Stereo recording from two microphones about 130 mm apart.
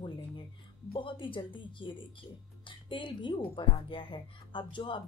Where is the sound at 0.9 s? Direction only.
40° left (ahead or behind).